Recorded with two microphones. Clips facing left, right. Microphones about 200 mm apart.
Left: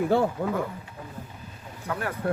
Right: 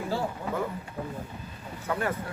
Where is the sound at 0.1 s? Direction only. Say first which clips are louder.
Left 8 dB; 60° left (ahead or behind).